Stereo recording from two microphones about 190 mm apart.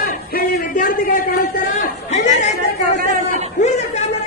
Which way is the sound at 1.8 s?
40° left (ahead or behind).